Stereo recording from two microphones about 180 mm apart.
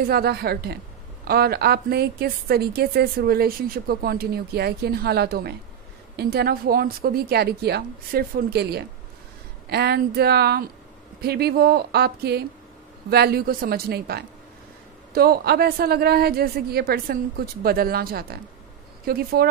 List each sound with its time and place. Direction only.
0.0 s a woman's voice: 60° right (ahead or behind)